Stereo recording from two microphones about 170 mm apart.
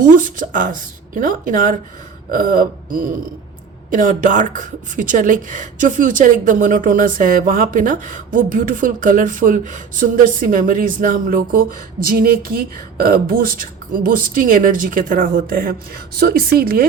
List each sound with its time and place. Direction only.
0.2 s speech: 50° right (ahead or behind)